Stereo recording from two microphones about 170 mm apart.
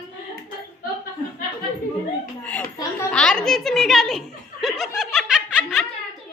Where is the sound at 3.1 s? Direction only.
5° left (ahead or behind).